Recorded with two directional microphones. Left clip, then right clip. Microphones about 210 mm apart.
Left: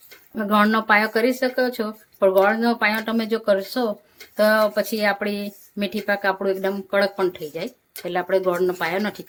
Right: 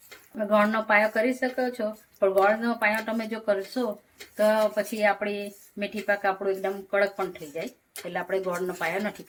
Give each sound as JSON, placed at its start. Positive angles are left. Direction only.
{"t": 0.3, "sound": "speech", "side_deg": 50}